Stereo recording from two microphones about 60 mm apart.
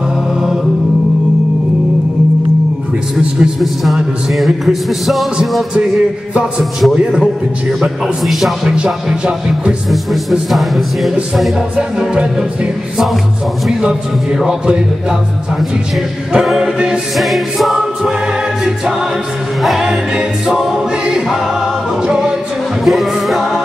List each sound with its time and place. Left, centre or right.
3.8 s music: centre
6.8 s music: centre
8.6 s choir: centre
10.5 s music: centre
11.7 s choir: centre
13.7 s choir: centre
16.3 s choir: centre
17.2 s choir: centre
19.6 s choir: centre
22.0 s music: centre